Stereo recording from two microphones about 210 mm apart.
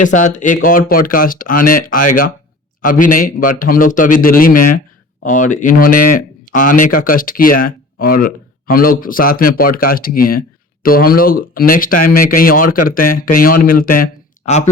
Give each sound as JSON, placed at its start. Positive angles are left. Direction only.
{"t": 0.0, "sound": "speech", "side_deg": 35}